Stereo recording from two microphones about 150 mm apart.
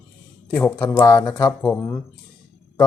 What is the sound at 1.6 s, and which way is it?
Speech, 10° left (ahead or behind).